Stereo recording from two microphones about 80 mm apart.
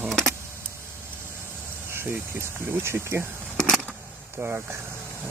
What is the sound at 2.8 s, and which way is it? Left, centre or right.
Speech, right.